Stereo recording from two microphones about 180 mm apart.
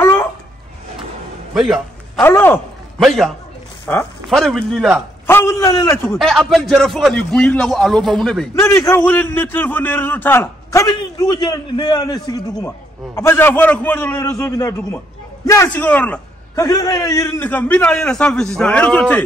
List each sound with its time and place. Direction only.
0.0 s a sound: 15° left (ahead or behind)
1.5 s music: centre (ahead or behind)
2.2 s a man's voice: 10° left (ahead or behind)
3.0 s a man's voice: centre (ahead or behind)
3.8 s speech: 10° left (ahead or behind)
4.3 s a man's voice: centre (ahead or behind)
5.2 s a man's voice: 15° left (ahead or behind)
6.0 s a man's voice: centre (ahead or behind)
8.5 s a man's voice: 15° left (ahead or behind)
16.6 s a man's voice: 20° left (ahead or behind)